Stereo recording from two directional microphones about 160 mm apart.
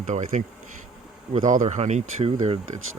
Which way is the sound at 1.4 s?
50° right (ahead or behind).